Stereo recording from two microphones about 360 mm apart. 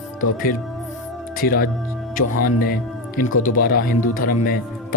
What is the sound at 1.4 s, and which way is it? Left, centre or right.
Speech, left.